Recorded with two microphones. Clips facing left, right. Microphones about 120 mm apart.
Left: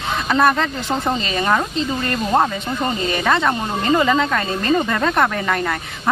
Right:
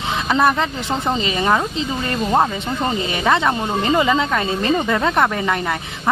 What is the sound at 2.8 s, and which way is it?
Speech, 20° right (ahead or behind).